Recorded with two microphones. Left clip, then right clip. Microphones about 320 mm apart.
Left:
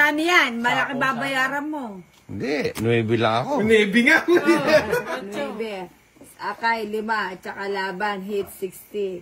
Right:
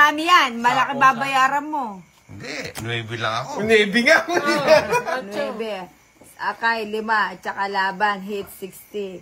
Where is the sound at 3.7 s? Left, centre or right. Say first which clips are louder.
Right 2 dB; right.